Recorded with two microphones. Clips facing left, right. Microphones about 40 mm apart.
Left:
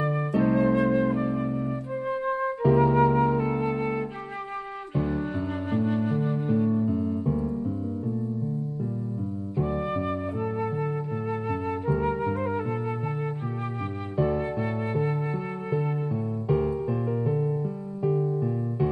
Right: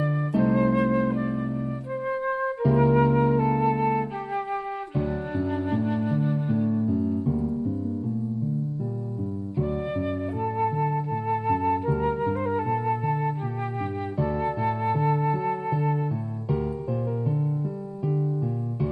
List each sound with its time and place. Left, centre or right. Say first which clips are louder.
0.0 s flute: even; centre
0.6 s music: left 1 dB; centre
0.9 s flute: even; centre
4.9 s music: left 1 dB; centre
6.9 s music: right 1 dB; left
9.6 s flute: even; centre
14.1 s music: left 4 dB; centre
14.4 s music: right 3 dB; centre
16.4 s music: left 3 dB; centre